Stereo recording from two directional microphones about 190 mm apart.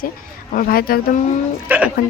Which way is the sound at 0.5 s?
50° left (ahead or behind).